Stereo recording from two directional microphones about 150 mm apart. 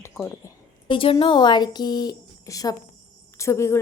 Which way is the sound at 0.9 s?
35° left (ahead or behind).